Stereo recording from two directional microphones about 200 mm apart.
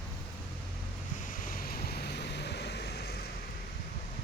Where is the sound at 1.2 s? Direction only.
40° left (ahead or behind).